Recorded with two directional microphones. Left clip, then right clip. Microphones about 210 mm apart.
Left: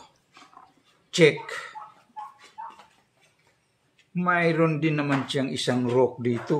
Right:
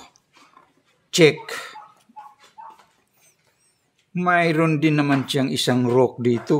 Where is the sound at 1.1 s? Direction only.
50° right (ahead or behind).